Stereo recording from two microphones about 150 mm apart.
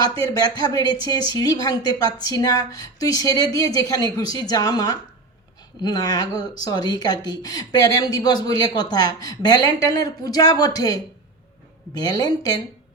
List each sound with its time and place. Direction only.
0.0 s speech: 25° left (ahead or behind)